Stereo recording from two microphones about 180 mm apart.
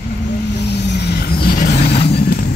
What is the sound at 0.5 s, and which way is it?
Vehicle, 70° left (ahead or behind).